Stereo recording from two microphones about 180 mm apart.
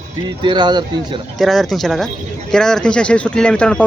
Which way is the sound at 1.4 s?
Centre (ahead or behind).